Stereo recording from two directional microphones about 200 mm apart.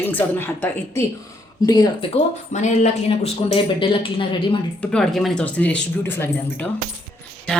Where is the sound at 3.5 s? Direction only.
25° left (ahead or behind).